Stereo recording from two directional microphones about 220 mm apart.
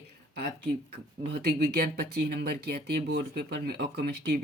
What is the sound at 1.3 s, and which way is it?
Speech, 45° right (ahead or behind).